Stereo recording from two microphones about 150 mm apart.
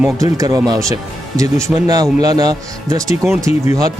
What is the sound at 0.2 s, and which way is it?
Speech, 25° right (ahead or behind).